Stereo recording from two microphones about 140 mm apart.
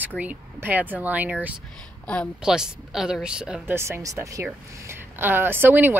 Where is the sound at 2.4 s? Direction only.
5° right (ahead or behind).